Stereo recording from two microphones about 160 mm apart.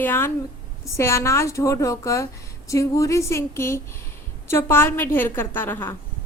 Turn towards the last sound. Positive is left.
turn(degrees=15)  # may be behind; listen again after turning